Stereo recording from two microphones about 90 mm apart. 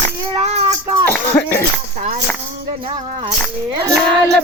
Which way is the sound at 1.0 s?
25° left (ahead or behind).